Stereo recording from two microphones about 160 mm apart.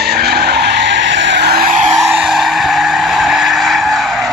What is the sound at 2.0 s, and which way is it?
Skidding, 5° right (ahead or behind).